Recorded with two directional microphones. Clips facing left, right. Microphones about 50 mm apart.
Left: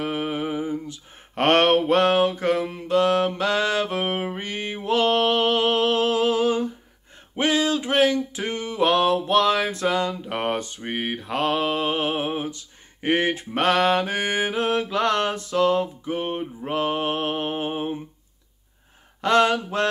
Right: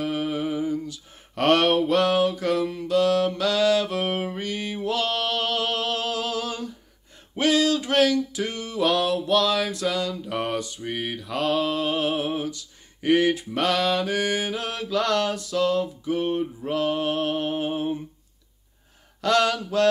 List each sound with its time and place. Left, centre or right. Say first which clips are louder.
0.0 s mantra: even; left
7.3 s a sound: right 1 dB; left
19.2 s mantra: left 3 dB; left